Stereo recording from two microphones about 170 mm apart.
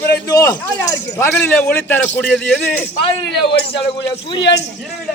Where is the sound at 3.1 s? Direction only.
30° left (ahead or behind).